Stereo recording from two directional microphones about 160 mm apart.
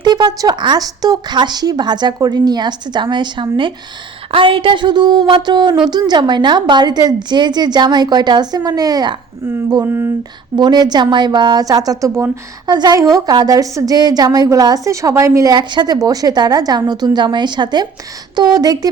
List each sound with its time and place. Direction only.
0.0 s a woman's voice: 25° right (ahead or behind)